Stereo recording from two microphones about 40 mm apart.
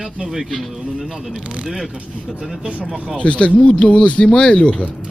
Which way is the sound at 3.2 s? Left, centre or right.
Left.